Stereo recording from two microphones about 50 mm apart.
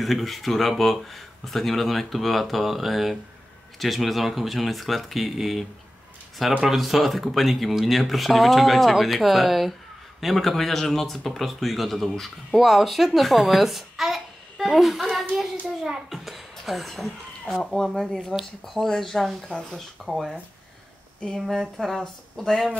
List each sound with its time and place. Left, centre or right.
0.0 s speech: centre
6.7 s a child's voice: centre
16.3 s speech: centre
21.4 s speech: centre